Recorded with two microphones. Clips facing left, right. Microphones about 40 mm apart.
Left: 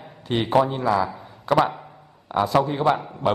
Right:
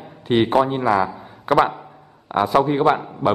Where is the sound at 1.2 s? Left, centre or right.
Right.